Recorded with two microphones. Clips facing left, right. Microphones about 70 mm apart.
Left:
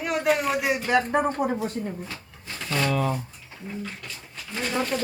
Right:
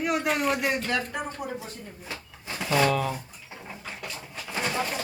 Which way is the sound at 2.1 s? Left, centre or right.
Centre.